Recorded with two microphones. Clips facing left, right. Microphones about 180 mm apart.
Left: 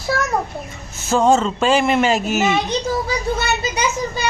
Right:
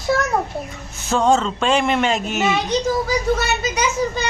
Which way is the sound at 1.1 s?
5° left (ahead or behind).